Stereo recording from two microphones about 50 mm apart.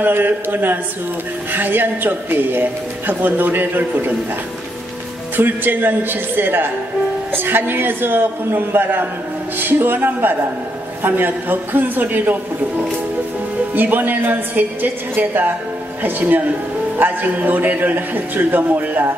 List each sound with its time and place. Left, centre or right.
0.0 s a man's voice: right
5.3 s a man's voice: right
13.7 s speech: right